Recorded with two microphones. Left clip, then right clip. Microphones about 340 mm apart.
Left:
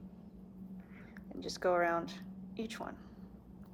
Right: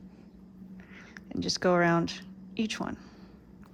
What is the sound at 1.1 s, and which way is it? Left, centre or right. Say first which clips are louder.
Speech: right 11 dB; right.